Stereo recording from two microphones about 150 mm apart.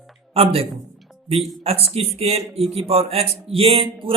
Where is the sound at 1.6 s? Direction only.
40° right (ahead or behind).